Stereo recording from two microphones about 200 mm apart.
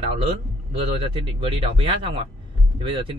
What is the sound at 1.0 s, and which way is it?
Speech, 30° right (ahead or behind).